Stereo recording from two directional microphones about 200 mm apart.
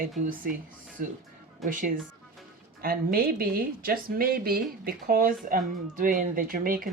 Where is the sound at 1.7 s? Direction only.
40° right (ahead or behind).